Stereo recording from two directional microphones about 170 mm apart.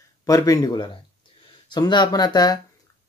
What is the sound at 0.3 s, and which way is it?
Speech, 20° left (ahead or behind).